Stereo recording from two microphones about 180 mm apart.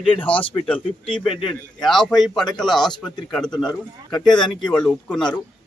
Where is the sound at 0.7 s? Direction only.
30° left (ahead or behind).